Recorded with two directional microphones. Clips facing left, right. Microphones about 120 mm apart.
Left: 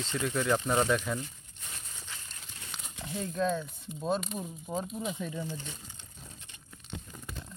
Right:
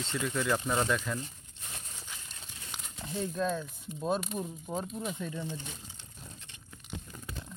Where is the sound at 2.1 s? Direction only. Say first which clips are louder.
Left 2 dB; 15° right (ahead or behind).